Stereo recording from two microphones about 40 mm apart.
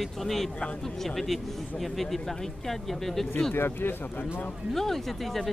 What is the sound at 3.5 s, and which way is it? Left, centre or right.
Speech, left.